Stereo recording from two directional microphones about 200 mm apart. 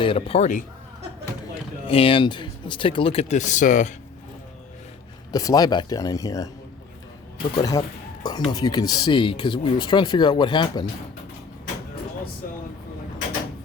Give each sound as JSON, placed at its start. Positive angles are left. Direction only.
{"t": 0.0, "sound": "speech", "side_deg": 25}
{"t": 1.9, "sound": "speech", "side_deg": 25}
{"t": 5.3, "sound": "speech", "side_deg": 20}
{"t": 7.5, "sound": "speech", "side_deg": 15}